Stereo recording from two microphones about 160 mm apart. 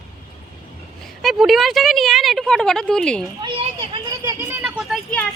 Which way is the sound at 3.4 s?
30° right (ahead or behind).